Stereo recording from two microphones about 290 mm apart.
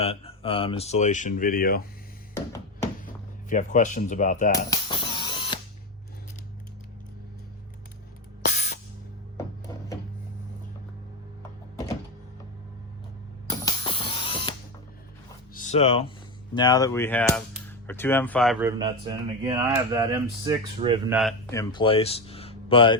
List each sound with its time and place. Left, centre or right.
0.0 s speech: centre
3.5 s speech: left
4.7 s a sound: centre
8.4 s music: left
13.5 s music: centre
15.5 s speech: left; by 18.5 s centre
18.6 s speech: centre
21.1 s speech: centre
21.5 s speech: centre